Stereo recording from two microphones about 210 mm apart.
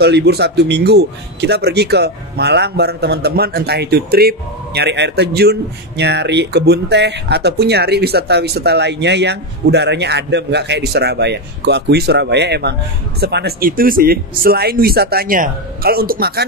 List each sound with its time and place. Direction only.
0.0 s speech: 50° right (ahead or behind)